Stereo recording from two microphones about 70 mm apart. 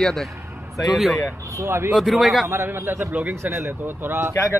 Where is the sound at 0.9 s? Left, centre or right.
Centre.